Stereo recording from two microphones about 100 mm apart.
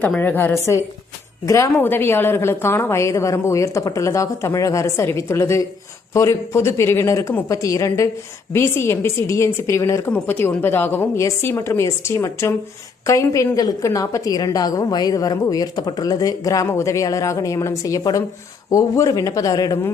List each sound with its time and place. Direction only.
0.2 s a woman's voice: 20° left (ahead or behind)
11.2 s a woman's voice: 30° left (ahead or behind)